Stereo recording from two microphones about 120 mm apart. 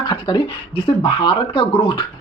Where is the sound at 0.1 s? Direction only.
40° left (ahead or behind).